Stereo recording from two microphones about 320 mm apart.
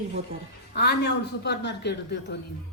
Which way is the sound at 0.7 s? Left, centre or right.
Left.